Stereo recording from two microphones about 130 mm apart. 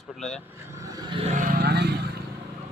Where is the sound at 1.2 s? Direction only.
80° right.